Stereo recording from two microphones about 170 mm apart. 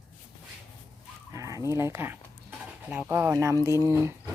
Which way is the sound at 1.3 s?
20° right (ahead or behind).